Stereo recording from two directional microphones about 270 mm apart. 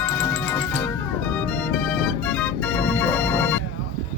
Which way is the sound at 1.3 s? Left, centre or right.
Centre.